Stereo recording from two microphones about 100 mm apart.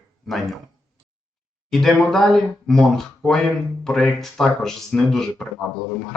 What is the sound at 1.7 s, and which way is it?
Speech, 5° left (ahead or behind).